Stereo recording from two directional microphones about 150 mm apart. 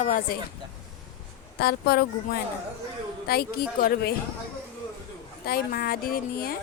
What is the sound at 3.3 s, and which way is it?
Speech, 85° left.